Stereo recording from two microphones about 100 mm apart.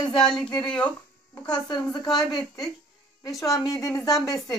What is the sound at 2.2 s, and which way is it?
Speech, 5° left (ahead or behind).